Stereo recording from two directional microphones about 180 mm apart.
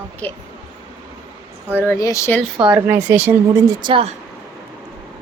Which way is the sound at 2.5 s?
5° right (ahead or behind).